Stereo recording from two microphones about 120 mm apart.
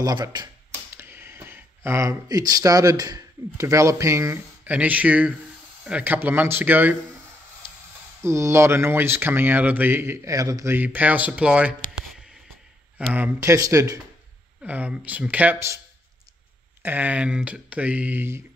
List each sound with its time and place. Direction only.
0.0 s speech: 35° right (ahead or behind)
0.9 s speech: 20° right (ahead or behind)
4.6 s speech: 15° right (ahead or behind)
8.2 s speech: 20° right (ahead or behind)
10.2 s speech: 30° right (ahead or behind); by 11.7 s 10° right (ahead or behind)
13.0 s speech: 10° right (ahead or behind)
13.4 s speech: 25° right (ahead or behind)
14.6 s speech: 10° right (ahead or behind)
16.8 s speech: 15° right (ahead or behind)